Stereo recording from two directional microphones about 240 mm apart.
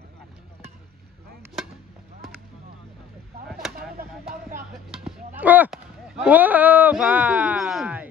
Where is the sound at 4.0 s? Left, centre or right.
Right.